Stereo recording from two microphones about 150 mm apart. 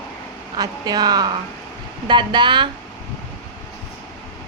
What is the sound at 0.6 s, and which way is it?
Speech, 25° right (ahead or behind).